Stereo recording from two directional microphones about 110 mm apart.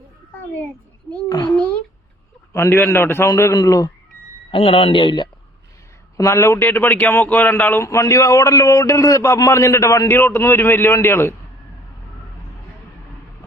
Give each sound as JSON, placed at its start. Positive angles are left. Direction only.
{"t": 1.3, "sound": "a child's voice", "side_deg": 40}
{"t": 2.5, "sound": "a man's voice", "side_deg": 20}
{"t": 4.5, "sound": "speech", "side_deg": 60}
{"t": 6.1, "sound": "a man's voice", "side_deg": 30}